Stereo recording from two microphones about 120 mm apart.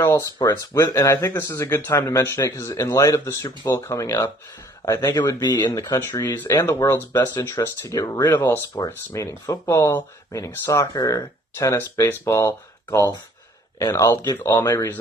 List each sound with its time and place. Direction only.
0.0 s speech: 30° left (ahead or behind)
8.4 s speech: 20° left (ahead or behind)